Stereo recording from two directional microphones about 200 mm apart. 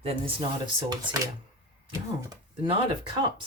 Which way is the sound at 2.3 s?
25° right (ahead or behind).